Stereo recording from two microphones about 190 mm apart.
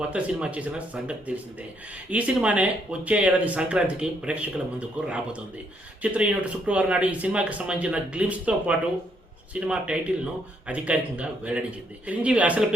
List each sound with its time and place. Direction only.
0.0 s speech: 5° right (ahead or behind)